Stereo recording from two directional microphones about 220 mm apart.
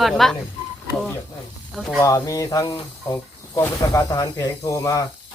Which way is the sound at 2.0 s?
15° left (ahead or behind).